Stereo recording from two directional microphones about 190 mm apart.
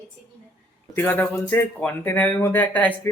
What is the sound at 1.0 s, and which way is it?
Speech, 10° left (ahead or behind).